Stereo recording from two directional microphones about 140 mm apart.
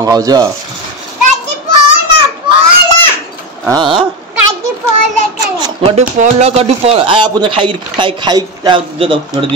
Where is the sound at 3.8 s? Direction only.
35° right (ahead or behind).